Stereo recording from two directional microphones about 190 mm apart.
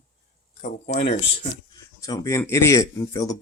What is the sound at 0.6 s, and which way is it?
Speech, 35° left (ahead or behind).